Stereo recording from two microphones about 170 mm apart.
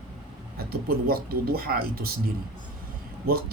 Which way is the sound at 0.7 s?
60° right (ahead or behind).